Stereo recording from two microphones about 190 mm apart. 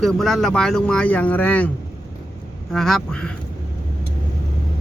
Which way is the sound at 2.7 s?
Centre (ahead or behind).